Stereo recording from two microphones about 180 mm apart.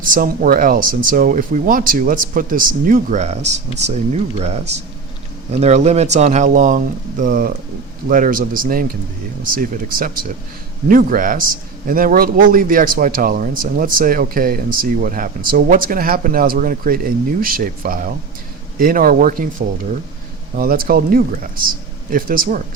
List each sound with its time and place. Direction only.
0.0 s speech: 50° right (ahead or behind)
10.8 s speech: 50° right (ahead or behind)